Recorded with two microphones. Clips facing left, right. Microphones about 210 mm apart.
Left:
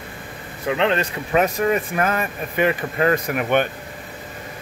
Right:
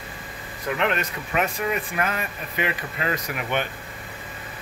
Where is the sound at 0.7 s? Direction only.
30° left (ahead or behind); by 3.6 s 55° left (ahead or behind).